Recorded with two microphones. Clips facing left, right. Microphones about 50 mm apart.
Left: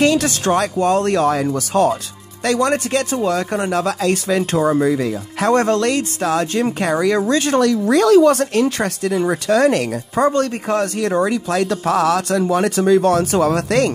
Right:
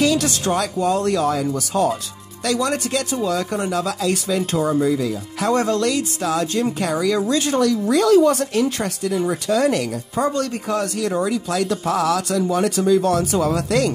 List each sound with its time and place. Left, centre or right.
0.0 s speech: left
2.4 s speech: left